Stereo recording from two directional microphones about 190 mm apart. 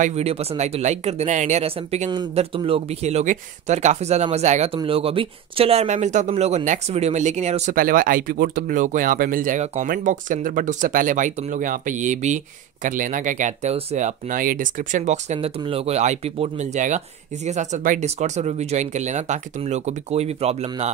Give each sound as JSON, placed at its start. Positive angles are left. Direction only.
{"t": 0.0, "sound": "speech", "side_deg": -35}